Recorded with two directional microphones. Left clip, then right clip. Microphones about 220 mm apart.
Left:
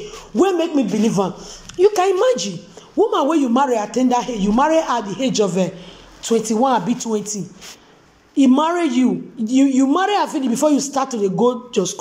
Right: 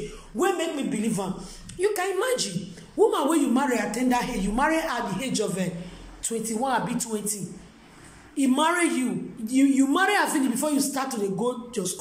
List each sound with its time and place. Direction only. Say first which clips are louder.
0.0 s a man's voice: left 8 dB; 10° left (ahead or behind)
8.4 s speech: left 7 dB; 10° left (ahead or behind)